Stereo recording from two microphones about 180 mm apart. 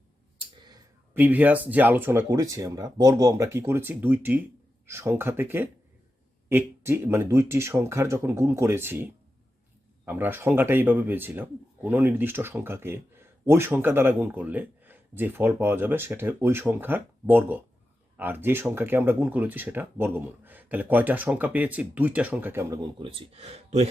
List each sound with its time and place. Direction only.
1.1 s speech: 10° right (ahead or behind)
10.1 s speech: 10° right (ahead or behind)
23.0 s speech: 30° right (ahead or behind)